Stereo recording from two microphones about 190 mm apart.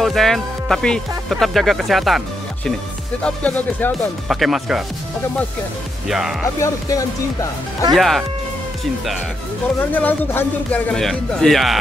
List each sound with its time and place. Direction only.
0.0 s speech: centre (ahead or behind)
6.0 s speech: centre (ahead or behind)
6.6 s speech: 15° left (ahead or behind)
7.9 s speech: centre (ahead or behind)
9.8 s speech: 10° left (ahead or behind)